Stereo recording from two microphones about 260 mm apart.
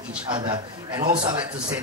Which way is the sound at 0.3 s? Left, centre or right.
Centre.